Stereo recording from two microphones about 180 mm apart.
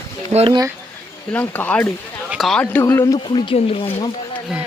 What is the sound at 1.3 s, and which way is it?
A man's voice, 10° left (ahead or behind).